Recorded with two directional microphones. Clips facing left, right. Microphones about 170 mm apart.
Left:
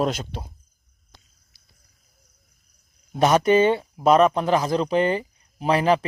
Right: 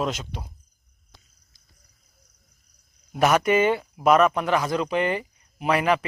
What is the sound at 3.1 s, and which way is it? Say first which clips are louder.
Speech: left 2 dB; 25° left (ahead or behind).